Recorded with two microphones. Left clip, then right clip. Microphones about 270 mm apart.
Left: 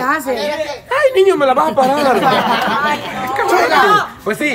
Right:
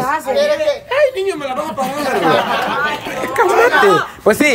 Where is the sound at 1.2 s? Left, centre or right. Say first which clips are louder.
Left 8 dB; centre.